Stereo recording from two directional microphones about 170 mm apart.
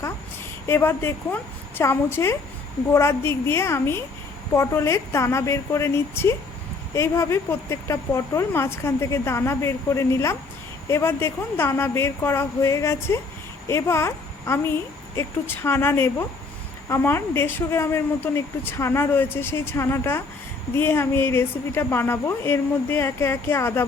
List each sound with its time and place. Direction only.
0.7 s a woman's voice: 15° left (ahead or behind)